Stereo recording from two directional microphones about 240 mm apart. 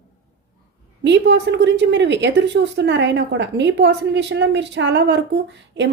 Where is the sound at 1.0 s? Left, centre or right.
Right.